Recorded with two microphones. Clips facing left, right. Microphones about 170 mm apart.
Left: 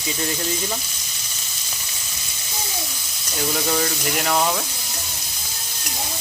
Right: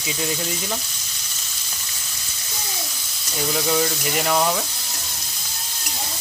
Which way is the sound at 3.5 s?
Centre (ahead or behind).